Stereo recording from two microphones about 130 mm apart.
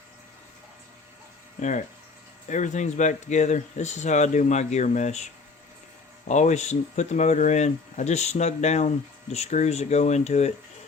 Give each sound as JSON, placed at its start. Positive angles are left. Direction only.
{"t": 2.5, "sound": "speech", "side_deg": 70}